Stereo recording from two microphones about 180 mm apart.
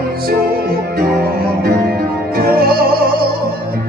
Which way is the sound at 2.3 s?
55° right (ahead or behind).